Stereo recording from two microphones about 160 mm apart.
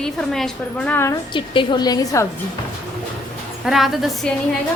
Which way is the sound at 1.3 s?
30° left (ahead or behind).